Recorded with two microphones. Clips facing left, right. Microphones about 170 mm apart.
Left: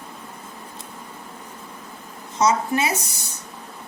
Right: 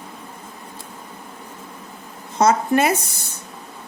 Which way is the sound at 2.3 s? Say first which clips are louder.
Right 4 dB; 55° right (ahead or behind).